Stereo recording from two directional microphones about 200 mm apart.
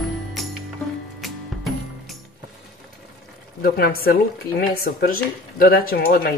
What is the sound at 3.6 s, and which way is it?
Speech, 50° left (ahead or behind).